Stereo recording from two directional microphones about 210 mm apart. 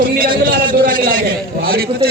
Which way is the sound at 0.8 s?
45° right (ahead or behind).